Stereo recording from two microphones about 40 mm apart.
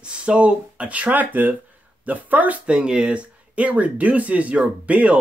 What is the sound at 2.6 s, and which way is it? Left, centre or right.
Speech, right.